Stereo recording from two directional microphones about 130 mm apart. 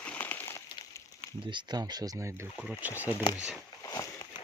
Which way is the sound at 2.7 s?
10° right (ahead or behind).